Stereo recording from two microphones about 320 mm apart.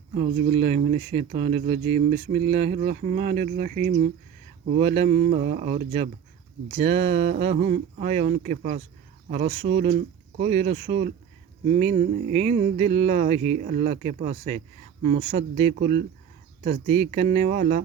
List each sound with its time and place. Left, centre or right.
0.2 s speech: right